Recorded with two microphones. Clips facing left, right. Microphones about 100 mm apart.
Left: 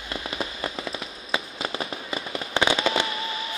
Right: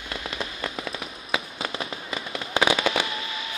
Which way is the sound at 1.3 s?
5° left (ahead or behind).